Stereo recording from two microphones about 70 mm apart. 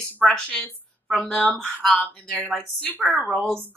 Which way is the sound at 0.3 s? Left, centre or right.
Centre.